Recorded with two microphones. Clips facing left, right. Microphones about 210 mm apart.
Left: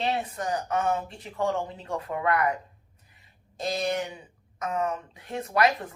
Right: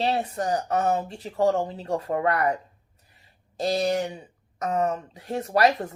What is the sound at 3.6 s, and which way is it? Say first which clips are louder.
Speech: right 4 dB; 35° right (ahead or behind).